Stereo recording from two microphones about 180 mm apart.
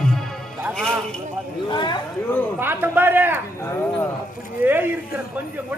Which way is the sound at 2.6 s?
10° right (ahead or behind).